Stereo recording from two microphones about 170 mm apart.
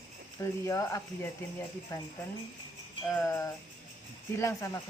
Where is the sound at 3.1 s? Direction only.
15° left (ahead or behind).